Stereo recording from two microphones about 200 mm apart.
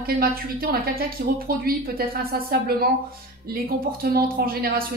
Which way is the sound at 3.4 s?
50° right (ahead or behind).